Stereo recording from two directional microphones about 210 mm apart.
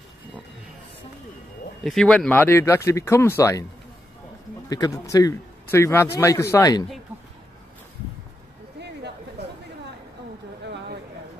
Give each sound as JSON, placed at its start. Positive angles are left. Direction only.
{"t": 1.9, "sound": "speech", "side_deg": 0}
{"t": 4.6, "sound": "a man's voice", "side_deg": 15}
{"t": 8.7, "sound": "a sound", "side_deg": -55}